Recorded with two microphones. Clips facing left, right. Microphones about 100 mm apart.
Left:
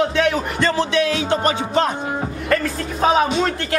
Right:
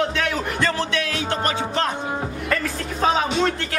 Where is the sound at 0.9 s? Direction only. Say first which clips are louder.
Left 6 dB; 20° left (ahead or behind).